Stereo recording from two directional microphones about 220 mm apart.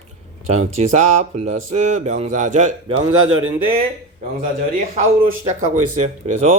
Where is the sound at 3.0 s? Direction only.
70° right (ahead or behind).